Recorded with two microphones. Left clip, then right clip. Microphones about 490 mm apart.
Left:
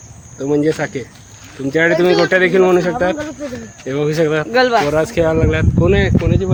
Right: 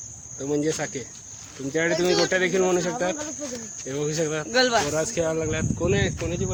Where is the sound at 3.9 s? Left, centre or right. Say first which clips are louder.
Left 11 dB; right.